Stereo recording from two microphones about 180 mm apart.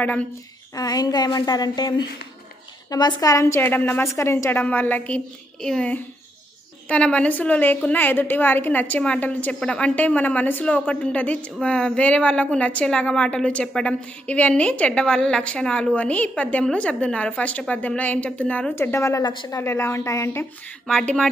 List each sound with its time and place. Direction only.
0.7 s a woman's voice: 20° left (ahead or behind)
19.6 s a woman's voice: 15° left (ahead or behind)
20.8 s speech: 5° left (ahead or behind)